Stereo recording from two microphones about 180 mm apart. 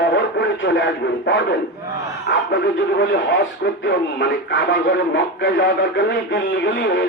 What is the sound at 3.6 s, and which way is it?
Speech, 85° left.